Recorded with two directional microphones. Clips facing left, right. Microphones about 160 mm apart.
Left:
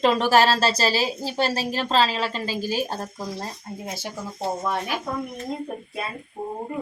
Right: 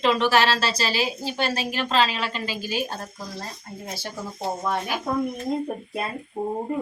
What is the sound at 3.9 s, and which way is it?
Speech, 20° left (ahead or behind).